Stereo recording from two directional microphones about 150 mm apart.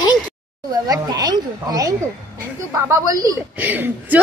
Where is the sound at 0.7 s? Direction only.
25° right (ahead or behind).